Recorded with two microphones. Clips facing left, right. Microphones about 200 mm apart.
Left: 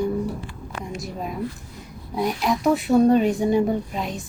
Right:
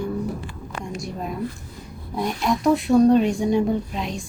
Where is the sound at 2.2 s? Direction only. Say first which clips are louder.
Even; centre (ahead or behind).